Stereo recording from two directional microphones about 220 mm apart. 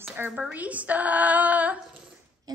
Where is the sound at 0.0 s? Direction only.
10° right (ahead or behind).